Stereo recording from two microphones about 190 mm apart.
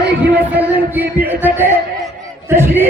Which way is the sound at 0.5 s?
10° right (ahead or behind).